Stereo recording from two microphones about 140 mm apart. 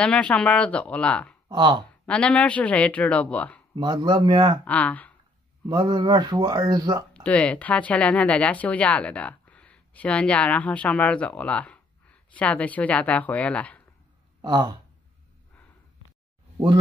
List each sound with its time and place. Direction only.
0.0 s speech: 10° left (ahead or behind)
1.5 s speech: 35° right (ahead or behind)
2.0 s speech: 5° left (ahead or behind)
3.7 s speech: 30° right (ahead or behind)
4.6 s speech: 10° left (ahead or behind)
5.7 s speech: 30° right (ahead or behind)
7.2 s speech: 10° left (ahead or behind)
14.4 s speech: 30° right (ahead or behind)
16.5 s speech: 35° right (ahead or behind)